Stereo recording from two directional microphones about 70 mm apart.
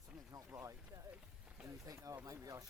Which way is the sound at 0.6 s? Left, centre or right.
Right.